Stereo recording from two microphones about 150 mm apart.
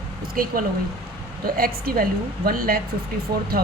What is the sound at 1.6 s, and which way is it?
A woman's voice, 75° right (ahead or behind).